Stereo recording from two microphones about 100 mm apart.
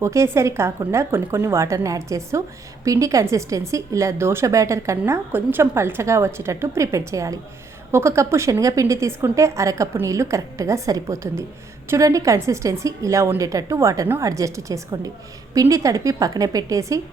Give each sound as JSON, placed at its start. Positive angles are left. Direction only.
{"t": 0.0, "sound": "a woman's voice", "side_deg": -30}